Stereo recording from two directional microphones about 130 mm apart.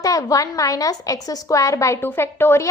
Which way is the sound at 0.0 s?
25° left (ahead or behind).